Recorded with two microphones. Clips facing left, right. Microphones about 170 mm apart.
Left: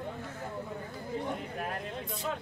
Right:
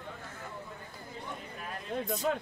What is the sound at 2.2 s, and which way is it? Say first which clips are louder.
Speech: right 4 dB; 55° right (ahead or behind).